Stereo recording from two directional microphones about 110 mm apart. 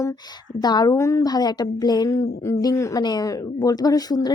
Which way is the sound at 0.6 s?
40° left (ahead or behind).